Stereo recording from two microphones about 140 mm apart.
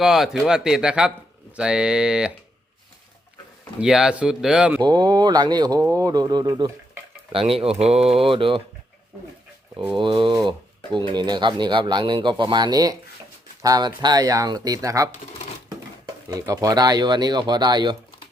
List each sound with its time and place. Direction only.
0.0 s speech: centre (ahead or behind)
3.8 s speech: 5° right (ahead or behind)
4.8 s speech: 30° right (ahead or behind)
7.3 s speech: 45° right (ahead or behind)
9.9 s speech: 35° right (ahead or behind)
16.3 s speech: 25° right (ahead or behind)